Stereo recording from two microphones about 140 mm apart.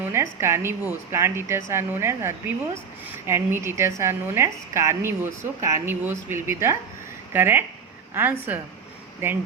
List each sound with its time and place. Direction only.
0.0 s a woman's voice: 20° right (ahead or behind)